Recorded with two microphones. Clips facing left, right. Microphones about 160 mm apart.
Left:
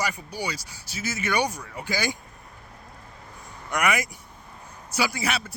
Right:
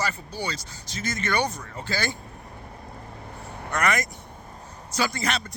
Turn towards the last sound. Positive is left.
turn(degrees=10)  # may be behind; listen again after turning